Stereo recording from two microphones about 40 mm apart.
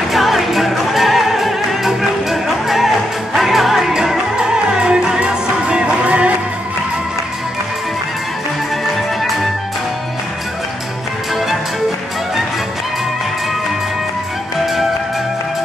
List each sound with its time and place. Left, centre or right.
0.1 s music: centre; by 5.9 s right
6.0 s music: right